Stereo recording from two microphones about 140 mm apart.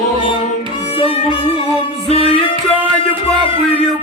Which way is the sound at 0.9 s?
40° left (ahead or behind).